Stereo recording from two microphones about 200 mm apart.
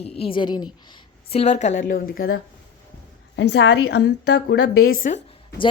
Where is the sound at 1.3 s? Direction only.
30° left (ahead or behind).